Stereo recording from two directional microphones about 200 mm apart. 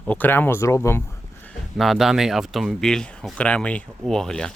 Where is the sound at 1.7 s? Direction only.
Centre (ahead or behind).